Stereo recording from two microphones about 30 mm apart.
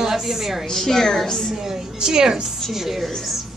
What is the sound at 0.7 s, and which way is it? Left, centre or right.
Speech, centre.